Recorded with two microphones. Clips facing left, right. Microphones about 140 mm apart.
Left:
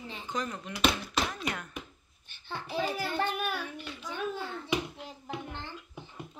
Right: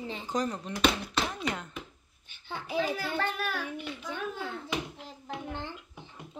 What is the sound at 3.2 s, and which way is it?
Speech, 15° left (ahead or behind).